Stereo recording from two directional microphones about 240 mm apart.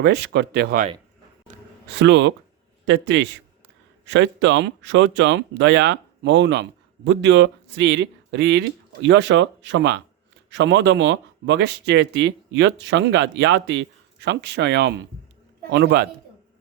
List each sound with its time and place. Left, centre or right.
0.0 s speech: right
2.0 s speech: right